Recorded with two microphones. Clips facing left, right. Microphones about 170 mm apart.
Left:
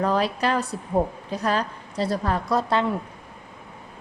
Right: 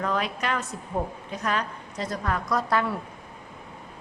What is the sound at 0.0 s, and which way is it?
A woman's voice, 35° left (ahead or behind).